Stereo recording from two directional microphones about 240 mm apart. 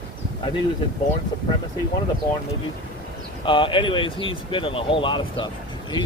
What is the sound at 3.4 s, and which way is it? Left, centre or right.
Speech, left.